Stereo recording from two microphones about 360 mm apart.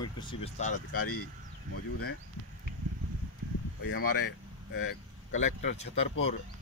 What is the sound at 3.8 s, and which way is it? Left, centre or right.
Speech, left.